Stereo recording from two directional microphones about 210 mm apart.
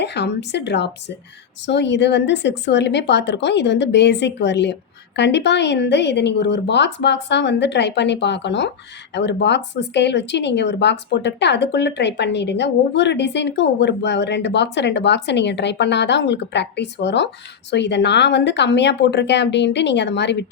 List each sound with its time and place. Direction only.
0.0 s speech: 55° left (ahead or behind)